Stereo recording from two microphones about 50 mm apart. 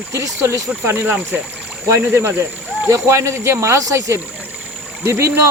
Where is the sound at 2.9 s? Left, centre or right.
Right.